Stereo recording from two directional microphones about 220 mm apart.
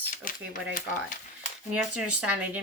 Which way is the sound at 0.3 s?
35° left (ahead or behind).